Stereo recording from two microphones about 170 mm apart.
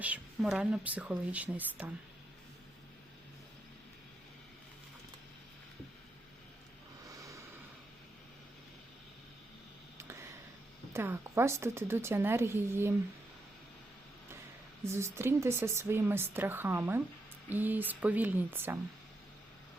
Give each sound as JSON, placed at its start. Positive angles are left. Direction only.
{"t": 0.0, "sound": "speech", "side_deg": -5}
{"t": 7.2, "sound": "a sound", "side_deg": -20}
{"t": 10.9, "sound": "speech", "side_deg": -15}
{"t": 15.1, "sound": "speech", "side_deg": -15}